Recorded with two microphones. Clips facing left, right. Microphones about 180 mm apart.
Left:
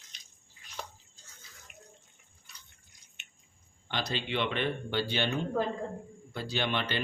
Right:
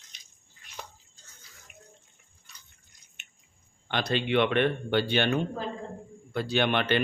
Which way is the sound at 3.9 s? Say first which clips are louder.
Right 7 dB; 60° right (ahead or behind).